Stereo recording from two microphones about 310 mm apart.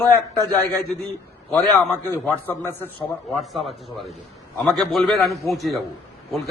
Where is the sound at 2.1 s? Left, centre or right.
Centre.